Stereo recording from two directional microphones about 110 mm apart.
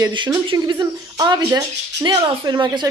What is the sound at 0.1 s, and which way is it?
Speech, 45° right (ahead or behind).